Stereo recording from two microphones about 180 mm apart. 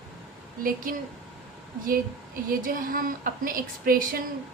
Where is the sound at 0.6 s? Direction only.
50° right (ahead or behind).